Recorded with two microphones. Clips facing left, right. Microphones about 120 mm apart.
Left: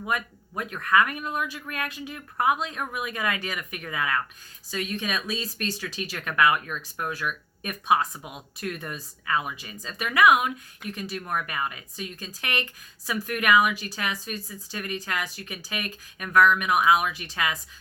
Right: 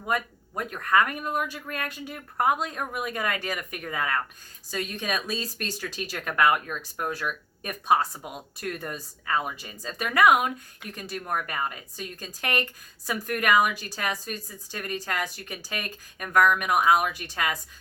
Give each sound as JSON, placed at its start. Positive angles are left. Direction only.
{"t": 0.6, "sound": "speech", "side_deg": -40}